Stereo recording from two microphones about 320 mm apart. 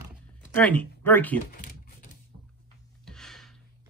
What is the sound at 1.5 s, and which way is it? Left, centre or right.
Typing, left.